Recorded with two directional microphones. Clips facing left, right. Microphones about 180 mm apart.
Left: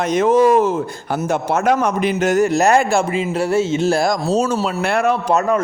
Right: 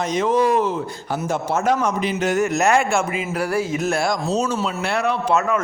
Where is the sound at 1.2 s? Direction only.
65° left (ahead or behind).